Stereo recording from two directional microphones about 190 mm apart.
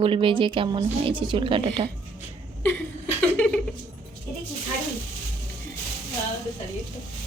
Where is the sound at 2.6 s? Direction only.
10° left (ahead or behind).